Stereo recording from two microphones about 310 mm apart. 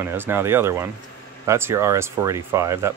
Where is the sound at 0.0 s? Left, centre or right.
Centre.